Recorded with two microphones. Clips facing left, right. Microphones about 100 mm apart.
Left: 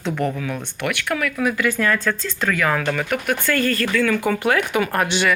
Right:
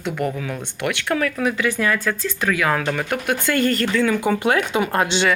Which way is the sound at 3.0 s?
20° right (ahead or behind).